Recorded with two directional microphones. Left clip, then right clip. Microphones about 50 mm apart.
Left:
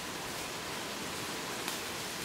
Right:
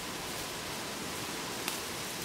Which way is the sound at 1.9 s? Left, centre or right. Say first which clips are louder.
Even; centre.